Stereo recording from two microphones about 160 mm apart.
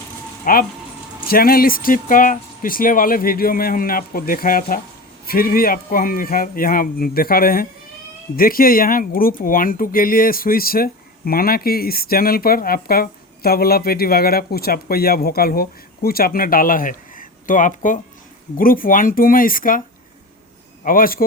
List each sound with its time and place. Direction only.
0.5 s speech: 60° left (ahead or behind)
20.8 s speech: 60° left (ahead or behind)